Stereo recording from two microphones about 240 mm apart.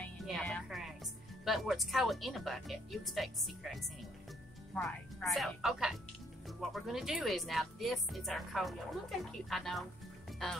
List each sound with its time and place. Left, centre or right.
0.0 s music: centre
1.4 s speech: centre